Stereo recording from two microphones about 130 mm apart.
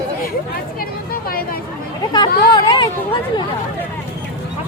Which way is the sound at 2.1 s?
30° left (ahead or behind).